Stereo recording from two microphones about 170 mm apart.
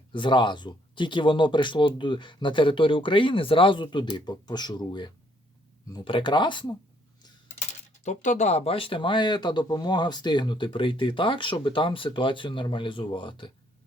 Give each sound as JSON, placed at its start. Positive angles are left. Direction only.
{"t": 0.1, "sound": "speech", "side_deg": 30}
{"t": 8.0, "sound": "speech", "side_deg": 45}